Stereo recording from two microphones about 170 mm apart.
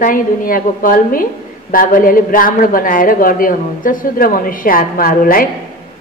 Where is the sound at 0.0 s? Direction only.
55° left (ahead or behind).